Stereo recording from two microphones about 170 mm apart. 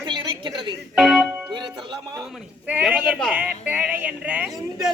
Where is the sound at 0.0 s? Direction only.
25° right (ahead or behind).